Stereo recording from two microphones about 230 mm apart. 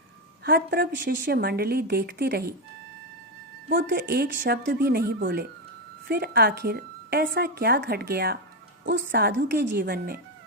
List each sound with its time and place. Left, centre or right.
0.4 s a woman's voice: right
3.7 s a woman's voice: right